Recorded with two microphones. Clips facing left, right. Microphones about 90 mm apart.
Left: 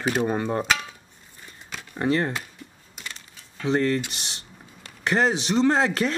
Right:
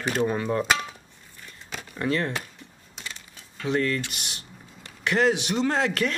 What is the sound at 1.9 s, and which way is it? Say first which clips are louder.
Speech: left 3 dB; 30° left (ahead or behind).